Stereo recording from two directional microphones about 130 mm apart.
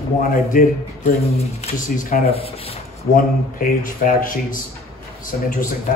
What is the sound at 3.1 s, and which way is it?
Speech, 90° left.